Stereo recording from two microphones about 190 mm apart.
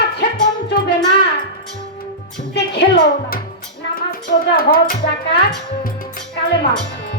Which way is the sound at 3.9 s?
50° left (ahead or behind).